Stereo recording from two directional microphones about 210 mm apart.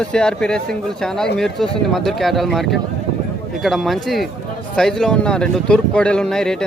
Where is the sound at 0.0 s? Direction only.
5° left (ahead or behind).